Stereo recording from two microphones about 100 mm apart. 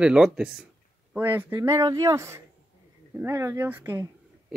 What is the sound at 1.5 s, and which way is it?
Speech, 35° right (ahead or behind).